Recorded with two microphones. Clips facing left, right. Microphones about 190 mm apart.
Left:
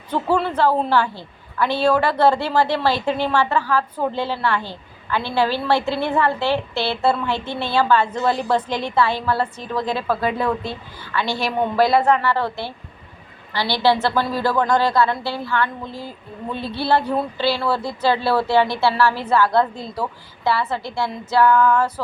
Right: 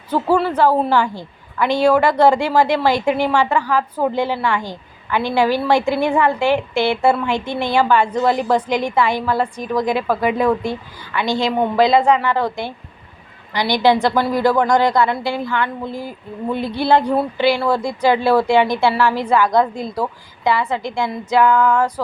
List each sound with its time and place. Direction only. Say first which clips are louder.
0.1 s a woman's voice: right 3 dB; 10° right (ahead or behind)